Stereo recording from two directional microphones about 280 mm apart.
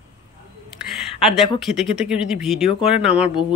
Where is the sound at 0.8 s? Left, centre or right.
Centre.